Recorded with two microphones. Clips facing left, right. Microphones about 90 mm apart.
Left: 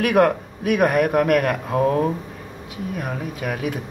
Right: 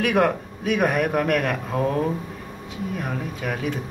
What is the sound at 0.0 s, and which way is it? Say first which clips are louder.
Speech: left 3 dB; 5° left (ahead or behind).